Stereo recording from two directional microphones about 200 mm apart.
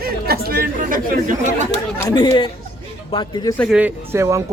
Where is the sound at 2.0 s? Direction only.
20° left (ahead or behind).